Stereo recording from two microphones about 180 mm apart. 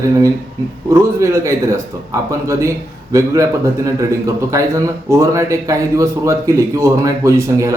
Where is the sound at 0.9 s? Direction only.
15° right (ahead or behind).